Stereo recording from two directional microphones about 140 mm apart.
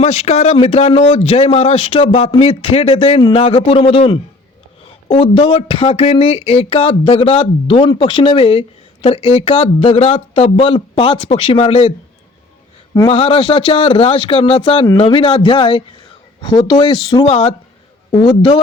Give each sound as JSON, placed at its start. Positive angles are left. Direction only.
{"t": 0.0, "sound": "speech", "side_deg": 50}
{"t": 13.1, "sound": "speech", "side_deg": 40}
{"t": 17.2, "sound": "speech", "side_deg": 45}